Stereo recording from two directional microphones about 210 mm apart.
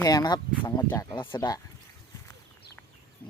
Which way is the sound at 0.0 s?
20° left (ahead or behind).